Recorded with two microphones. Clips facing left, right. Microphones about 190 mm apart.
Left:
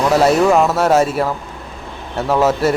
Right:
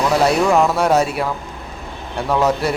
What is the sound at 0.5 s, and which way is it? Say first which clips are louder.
Speech: left 2 dB; 5° left (ahead or behind).